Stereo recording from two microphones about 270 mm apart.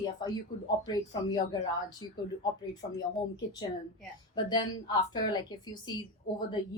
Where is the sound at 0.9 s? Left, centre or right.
Centre.